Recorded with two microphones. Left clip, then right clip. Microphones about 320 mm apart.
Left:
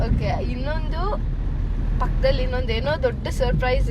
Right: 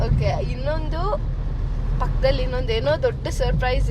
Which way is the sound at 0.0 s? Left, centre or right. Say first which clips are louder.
Right 1 dB; centre.